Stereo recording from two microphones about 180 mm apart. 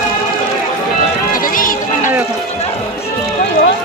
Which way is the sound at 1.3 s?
50° left (ahead or behind).